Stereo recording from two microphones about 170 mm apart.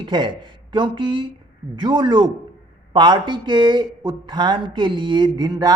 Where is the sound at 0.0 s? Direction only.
25° right (ahead or behind).